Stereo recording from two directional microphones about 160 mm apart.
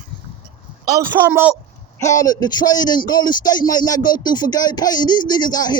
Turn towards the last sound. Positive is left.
turn(degrees=25)  # may be behind; listen again after turning